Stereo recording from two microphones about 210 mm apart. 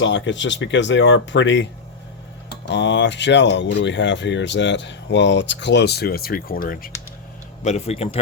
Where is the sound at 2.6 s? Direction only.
60° left (ahead or behind).